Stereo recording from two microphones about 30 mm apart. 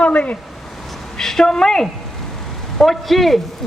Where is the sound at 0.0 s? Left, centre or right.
Left.